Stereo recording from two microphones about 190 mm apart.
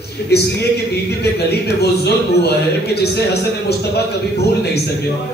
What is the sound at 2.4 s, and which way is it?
Speech, 60° left (ahead or behind).